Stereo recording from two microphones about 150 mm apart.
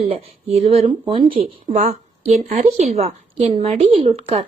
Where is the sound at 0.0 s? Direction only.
40° right (ahead or behind).